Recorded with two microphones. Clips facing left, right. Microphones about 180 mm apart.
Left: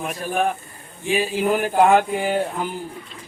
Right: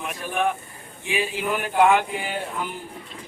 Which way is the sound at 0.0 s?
35° left (ahead or behind).